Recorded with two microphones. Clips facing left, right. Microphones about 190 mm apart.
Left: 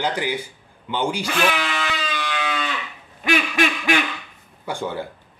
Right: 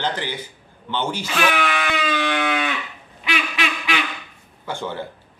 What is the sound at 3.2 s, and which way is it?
Quack, 45° left (ahead or behind).